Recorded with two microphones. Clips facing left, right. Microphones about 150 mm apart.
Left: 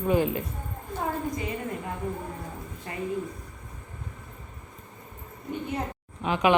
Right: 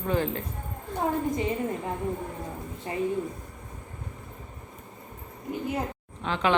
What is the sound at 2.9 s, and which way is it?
Speech, 25° right (ahead or behind).